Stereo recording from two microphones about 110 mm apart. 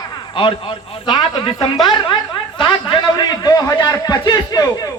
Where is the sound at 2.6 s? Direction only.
45° left (ahead or behind).